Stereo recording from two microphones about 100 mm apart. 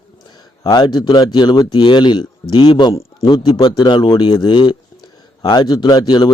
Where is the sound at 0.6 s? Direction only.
45° left (ahead or behind).